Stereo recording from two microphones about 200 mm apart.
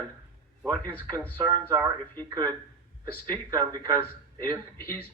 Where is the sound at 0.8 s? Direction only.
10° left (ahead or behind).